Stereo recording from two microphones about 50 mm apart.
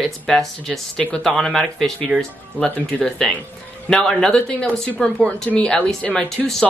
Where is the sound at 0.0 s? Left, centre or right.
Centre.